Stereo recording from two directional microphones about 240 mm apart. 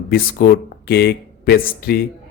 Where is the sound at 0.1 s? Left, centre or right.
Left.